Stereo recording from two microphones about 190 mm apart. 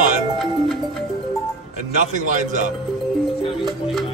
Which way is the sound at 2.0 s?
40° right (ahead or behind).